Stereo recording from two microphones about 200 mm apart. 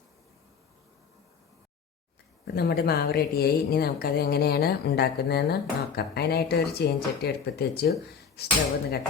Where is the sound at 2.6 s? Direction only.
50° left (ahead or behind).